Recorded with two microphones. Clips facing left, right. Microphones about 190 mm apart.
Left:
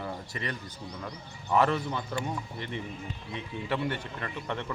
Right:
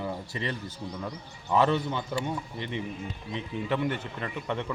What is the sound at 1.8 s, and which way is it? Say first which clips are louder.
Speech: right 2 dB; centre (ahead or behind).